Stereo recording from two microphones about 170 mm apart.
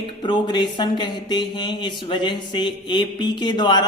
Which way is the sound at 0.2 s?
25° left (ahead or behind).